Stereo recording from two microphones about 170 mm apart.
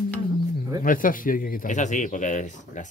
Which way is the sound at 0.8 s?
55° left (ahead or behind).